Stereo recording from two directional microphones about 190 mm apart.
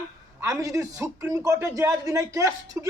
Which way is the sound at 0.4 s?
15° right (ahead or behind).